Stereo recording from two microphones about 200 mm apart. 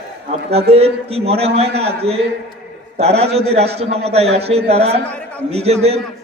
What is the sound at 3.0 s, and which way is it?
A man's voice, 30° right (ahead or behind).